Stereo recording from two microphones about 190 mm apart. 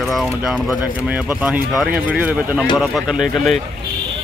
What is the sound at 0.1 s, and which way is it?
Speech, centre (ahead or behind).